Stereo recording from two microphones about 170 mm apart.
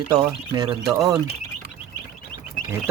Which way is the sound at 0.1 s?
25° right (ahead or behind).